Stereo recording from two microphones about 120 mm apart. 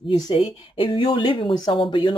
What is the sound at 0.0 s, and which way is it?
Speech, 40° left (ahead or behind).